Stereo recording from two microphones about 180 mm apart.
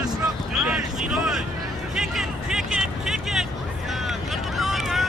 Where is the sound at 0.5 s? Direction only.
Centre (ahead or behind).